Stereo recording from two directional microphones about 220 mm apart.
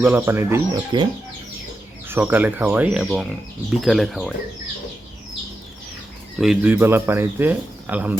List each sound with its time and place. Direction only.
0.0 s speech: 10° right (ahead or behind)
2.0 s speech: 10° right (ahead or behind)
6.4 s speech: 5° right (ahead or behind)